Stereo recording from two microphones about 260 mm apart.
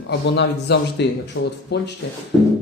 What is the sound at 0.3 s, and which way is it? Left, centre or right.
Speech, left.